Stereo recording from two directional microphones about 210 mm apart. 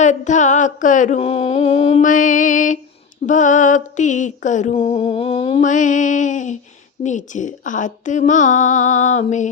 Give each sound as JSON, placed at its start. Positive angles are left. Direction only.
{"t": 0.0, "sound": "mantra", "side_deg": 35}